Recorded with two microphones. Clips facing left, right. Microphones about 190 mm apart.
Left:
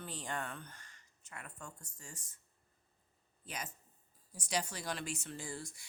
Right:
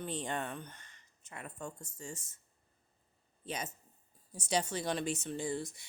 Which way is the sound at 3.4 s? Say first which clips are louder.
Right 5 dB; 25° right (ahead or behind).